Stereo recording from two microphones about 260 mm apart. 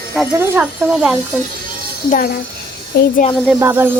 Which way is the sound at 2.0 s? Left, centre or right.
Left.